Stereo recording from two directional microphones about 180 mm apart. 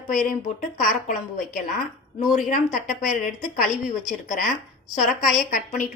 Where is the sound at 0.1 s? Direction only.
45° left (ahead or behind).